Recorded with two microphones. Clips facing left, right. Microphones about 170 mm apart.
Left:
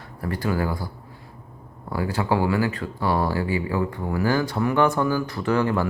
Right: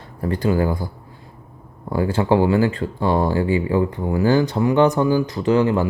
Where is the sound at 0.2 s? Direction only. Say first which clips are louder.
Right 6 dB; 20° right (ahead or behind).